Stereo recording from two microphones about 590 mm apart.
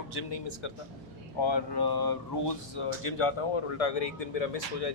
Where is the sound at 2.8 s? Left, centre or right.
Left.